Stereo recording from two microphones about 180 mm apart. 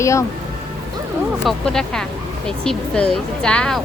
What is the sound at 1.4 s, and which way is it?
Speech, 5° left (ahead or behind).